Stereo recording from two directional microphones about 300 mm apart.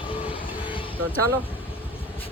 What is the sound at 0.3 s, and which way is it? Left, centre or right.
Train, centre.